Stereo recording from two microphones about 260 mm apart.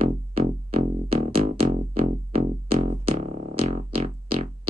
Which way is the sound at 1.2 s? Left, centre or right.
Right.